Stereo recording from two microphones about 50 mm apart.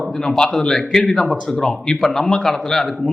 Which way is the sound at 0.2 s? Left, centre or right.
Centre.